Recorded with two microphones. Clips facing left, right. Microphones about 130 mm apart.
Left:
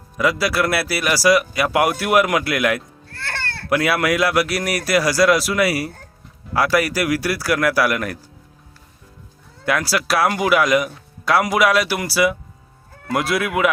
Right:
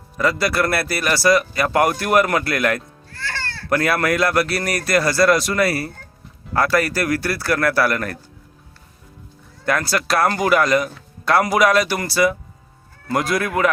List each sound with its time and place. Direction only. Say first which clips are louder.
0.2 s speech: even; 5° left (ahead or behind)
3.1 s music: even; 60° left (ahead or behind)
3.7 s speech: even; 5° left (ahead or behind)
9.6 s speech: even; 5° left (ahead or behind)